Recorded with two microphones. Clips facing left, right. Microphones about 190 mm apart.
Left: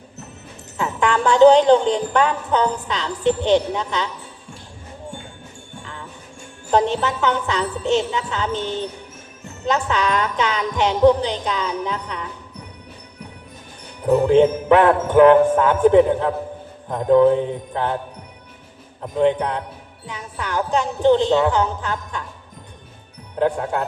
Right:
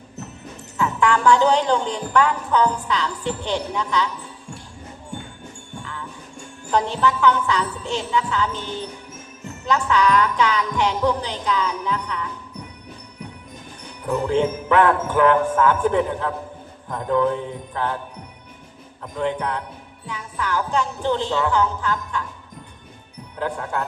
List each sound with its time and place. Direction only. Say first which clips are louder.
0.8 s speech: even; 20° left (ahead or behind)
5.8 s jingle bell: right 1 dB; 20° left (ahead or behind)
6.7 s speech: left 2 dB; 20° left (ahead or behind)
14.3 s speech: left 6 dB; 20° left (ahead or behind)
19.1 s speech: left 6 dB; 20° left (ahead or behind)
23.4 s speech: left 6 dB; 20° left (ahead or behind)